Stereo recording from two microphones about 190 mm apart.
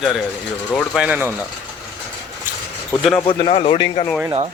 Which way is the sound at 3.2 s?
25° left (ahead or behind).